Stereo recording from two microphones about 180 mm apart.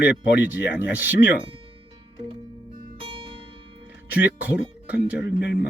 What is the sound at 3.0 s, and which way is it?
Music, 30° right (ahead or behind).